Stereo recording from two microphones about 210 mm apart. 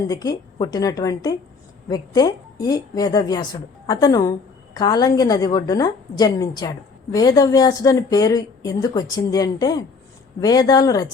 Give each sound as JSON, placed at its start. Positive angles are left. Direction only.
{"t": 0.1, "sound": "a woman's voice", "side_deg": 15}